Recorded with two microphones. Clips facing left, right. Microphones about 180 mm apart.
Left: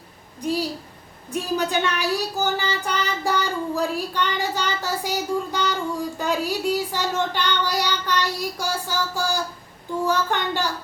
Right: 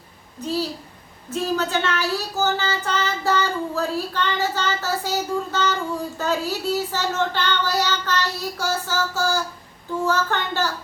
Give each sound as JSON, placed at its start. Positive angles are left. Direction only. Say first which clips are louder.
{"t": 0.3, "sound": "a child's voice", "louder": "left 1 dB", "side_deg": 15}